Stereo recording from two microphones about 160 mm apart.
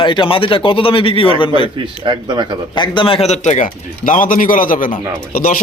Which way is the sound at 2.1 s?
30° right (ahead or behind).